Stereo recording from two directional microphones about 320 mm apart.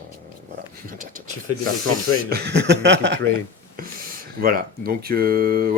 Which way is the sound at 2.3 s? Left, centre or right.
Right.